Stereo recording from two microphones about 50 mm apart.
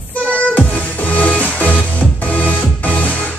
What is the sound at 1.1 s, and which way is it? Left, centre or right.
Music, left.